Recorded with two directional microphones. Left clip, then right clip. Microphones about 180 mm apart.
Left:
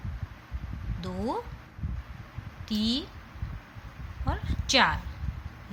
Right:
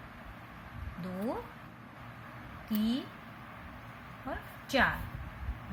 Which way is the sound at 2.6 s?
20° left (ahead or behind).